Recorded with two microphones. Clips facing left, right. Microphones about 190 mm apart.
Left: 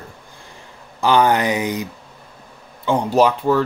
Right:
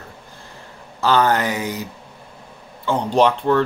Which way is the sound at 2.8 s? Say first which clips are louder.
Left 1 dB; 10° left (ahead or behind).